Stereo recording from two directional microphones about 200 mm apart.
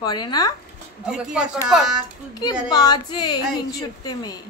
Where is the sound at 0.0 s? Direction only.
20° left (ahead or behind).